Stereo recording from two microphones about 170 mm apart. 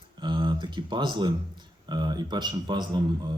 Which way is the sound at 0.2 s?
25° right (ahead or behind).